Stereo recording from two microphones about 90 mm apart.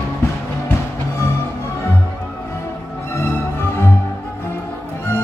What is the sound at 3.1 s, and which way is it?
Music, 25° left (ahead or behind).